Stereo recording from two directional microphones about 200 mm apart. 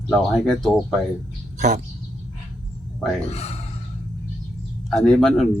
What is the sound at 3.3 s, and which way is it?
Speech, 30° left (ahead or behind).